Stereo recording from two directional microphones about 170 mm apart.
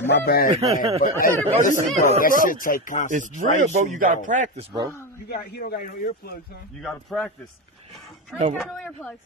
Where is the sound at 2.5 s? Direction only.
55° left (ahead or behind).